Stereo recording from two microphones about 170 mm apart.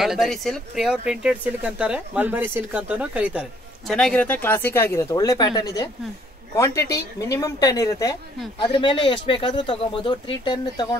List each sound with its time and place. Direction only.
0.0 s speech: centre (ahead or behind); by 11.0 s 25° left (ahead or behind)